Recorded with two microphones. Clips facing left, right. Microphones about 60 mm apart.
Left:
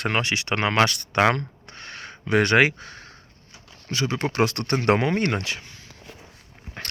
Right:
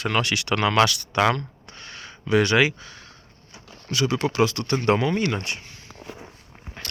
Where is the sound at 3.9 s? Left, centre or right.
Left.